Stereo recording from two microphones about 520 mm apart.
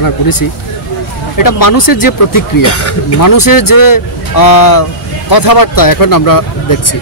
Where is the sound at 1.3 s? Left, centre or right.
Left.